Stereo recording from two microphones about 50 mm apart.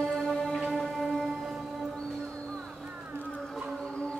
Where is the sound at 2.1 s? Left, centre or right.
Centre.